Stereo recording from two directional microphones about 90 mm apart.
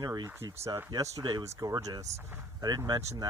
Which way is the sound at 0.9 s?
35° right (ahead or behind).